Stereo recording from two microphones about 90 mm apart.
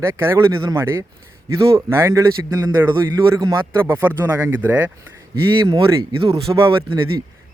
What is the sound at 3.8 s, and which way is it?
Speech, 25° right (ahead or behind).